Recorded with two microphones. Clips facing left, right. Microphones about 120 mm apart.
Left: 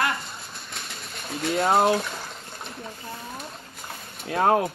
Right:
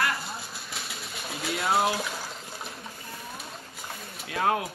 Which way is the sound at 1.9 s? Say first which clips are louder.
Left 6 dB; 5° right (ahead or behind).